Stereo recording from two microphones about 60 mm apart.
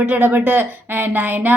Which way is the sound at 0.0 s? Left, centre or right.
Right.